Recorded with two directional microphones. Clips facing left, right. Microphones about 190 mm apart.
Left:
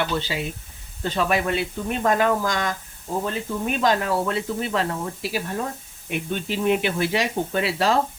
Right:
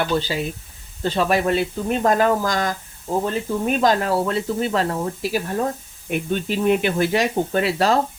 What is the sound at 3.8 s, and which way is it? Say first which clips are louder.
Speech: right 1 dB; 40° right (ahead or behind).